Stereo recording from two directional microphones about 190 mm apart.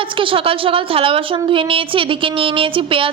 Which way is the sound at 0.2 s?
25° right (ahead or behind).